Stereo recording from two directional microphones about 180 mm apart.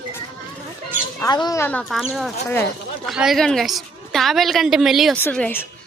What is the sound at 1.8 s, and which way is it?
A woman's voice, centre (ahead or behind).